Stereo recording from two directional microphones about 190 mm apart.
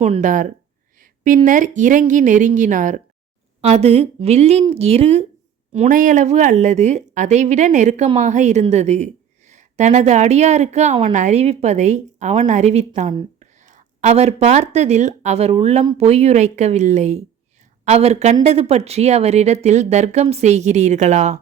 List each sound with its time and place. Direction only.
0.0 s a woman's voice: 35° right (ahead or behind)
0.9 s a sound: 45° right (ahead or behind)
1.5 s a woman's voice: 40° right (ahead or behind)